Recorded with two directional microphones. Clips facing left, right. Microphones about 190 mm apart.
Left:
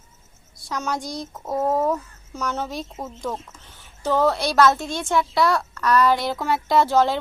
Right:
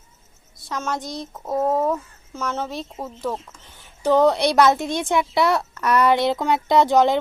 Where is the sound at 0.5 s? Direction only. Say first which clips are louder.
Even; centre (ahead or behind).